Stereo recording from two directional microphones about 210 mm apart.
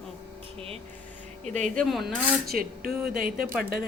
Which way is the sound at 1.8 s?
Centre (ahead or behind).